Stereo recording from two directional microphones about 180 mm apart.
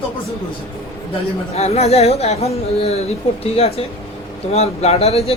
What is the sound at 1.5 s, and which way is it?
Speech, 35° left (ahead or behind).